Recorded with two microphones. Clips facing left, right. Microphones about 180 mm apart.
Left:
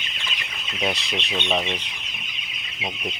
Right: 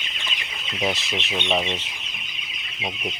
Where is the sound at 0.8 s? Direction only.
Centre (ahead or behind).